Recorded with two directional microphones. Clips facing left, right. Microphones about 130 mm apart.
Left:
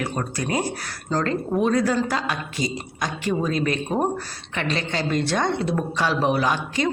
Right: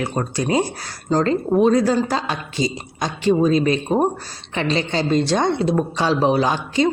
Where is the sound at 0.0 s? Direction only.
25° right (ahead or behind).